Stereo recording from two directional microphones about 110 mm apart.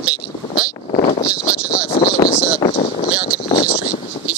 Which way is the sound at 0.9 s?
80° left.